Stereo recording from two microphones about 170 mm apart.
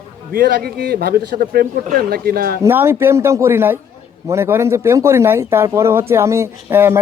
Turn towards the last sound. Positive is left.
turn(degrees=-15)  # may be behind; listen again after turning